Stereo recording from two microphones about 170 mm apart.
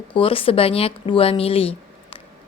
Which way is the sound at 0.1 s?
30° left (ahead or behind).